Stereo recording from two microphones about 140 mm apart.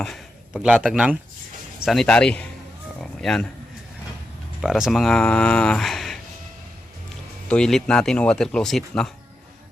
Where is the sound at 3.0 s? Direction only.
5° left (ahead or behind).